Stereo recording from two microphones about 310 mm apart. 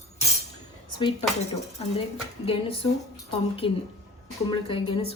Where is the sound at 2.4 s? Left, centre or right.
Centre.